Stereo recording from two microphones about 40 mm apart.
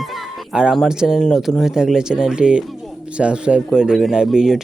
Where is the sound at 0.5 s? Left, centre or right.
Right.